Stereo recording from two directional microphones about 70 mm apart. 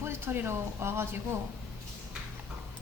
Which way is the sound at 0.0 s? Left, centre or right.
Right.